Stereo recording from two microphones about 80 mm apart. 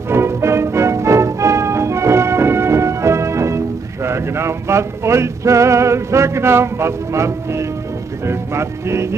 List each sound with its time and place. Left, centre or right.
0.1 s music: right